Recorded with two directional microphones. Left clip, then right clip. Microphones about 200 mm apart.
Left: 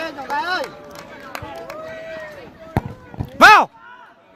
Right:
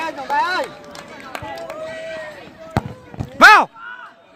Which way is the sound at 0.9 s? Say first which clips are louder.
Right 1 dB; 50° right (ahead or behind).